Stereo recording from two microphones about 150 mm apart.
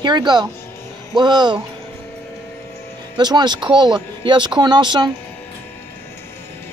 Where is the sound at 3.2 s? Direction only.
30° right (ahead or behind).